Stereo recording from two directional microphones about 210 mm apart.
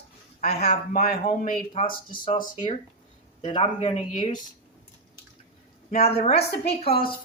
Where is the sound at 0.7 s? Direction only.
45° left (ahead or behind).